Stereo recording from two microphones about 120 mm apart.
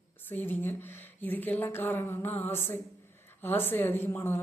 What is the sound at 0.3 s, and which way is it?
A woman's voice, 15° left (ahead or behind).